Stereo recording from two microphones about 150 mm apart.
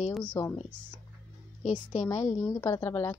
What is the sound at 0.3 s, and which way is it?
Speech, 20° left (ahead or behind).